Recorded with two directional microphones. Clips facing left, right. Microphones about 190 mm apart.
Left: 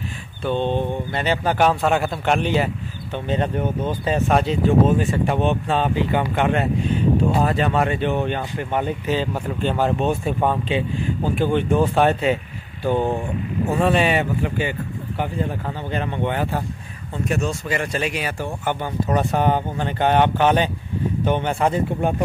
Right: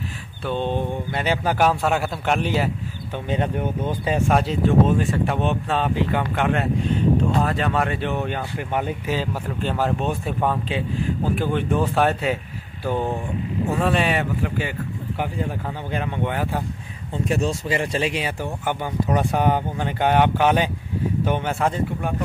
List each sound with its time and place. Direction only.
0.4 s speech: 5° right (ahead or behind)
17.1 s speech: 30° right (ahead or behind)
18.4 s speech: 10° right (ahead or behind)